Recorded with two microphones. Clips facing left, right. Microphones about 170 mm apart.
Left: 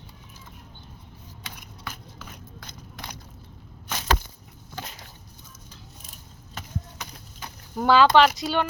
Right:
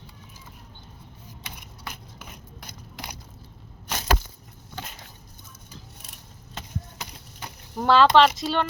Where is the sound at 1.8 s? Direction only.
15° right (ahead or behind).